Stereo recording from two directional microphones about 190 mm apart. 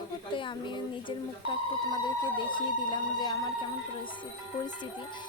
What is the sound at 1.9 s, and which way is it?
Music, 20° left (ahead or behind).